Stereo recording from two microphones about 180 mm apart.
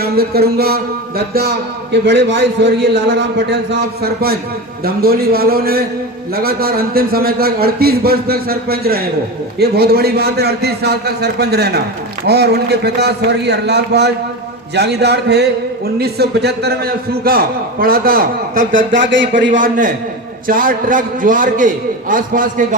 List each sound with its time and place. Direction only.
0.0 s music: 60° right (ahead or behind)
1.3 s a man's voice: 60° right (ahead or behind)
18.9 s speech: 90° right
19.5 s a man's voice: 45° right (ahead or behind)